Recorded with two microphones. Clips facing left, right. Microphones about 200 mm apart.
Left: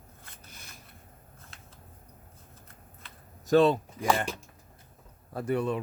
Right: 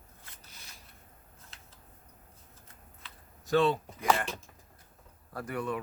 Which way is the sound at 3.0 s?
45° left (ahead or behind).